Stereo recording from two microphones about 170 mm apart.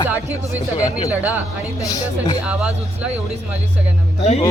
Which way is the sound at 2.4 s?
5° right (ahead or behind).